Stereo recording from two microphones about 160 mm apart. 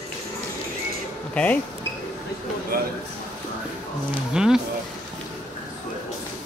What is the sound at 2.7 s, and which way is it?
Speech, 65° right (ahead or behind).